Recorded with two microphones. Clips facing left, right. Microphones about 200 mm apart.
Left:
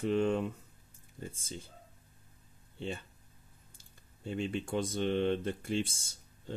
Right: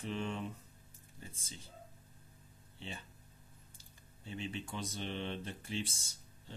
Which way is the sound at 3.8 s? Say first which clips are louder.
Left 11 dB; 50° left (ahead or behind).